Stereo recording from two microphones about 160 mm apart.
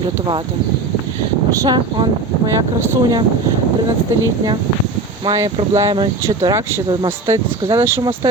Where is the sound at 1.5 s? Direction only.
25° right (ahead or behind).